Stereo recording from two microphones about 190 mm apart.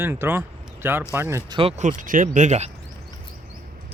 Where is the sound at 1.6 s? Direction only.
35° right (ahead or behind).